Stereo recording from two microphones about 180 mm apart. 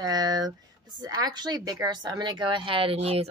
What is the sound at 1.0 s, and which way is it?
A woman's voice, 20° right (ahead or behind).